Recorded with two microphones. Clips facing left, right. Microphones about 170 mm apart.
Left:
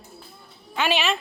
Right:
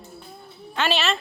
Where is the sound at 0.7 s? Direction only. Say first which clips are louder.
Even; 10° left (ahead or behind).